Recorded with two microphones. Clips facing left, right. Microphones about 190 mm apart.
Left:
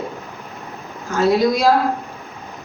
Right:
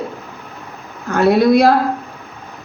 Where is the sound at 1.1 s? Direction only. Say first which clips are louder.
Right 4 dB; 60° right (ahead or behind).